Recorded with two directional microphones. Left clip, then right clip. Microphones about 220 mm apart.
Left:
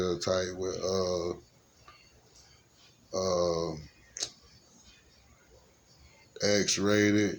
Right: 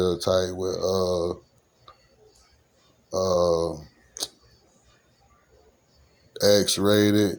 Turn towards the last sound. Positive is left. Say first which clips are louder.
# right 6 dB
turn(degrees=-25)  # may be behind; listen again after turning